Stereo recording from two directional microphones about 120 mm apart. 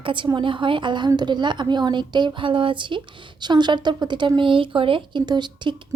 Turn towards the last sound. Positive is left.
turn(degrees=-40)  # may be behind; listen again after turning